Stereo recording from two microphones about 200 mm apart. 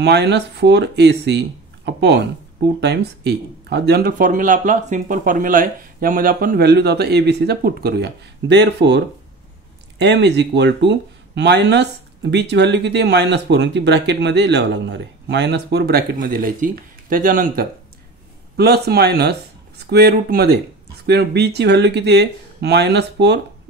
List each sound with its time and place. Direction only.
0.0 s speech: 55° right (ahead or behind)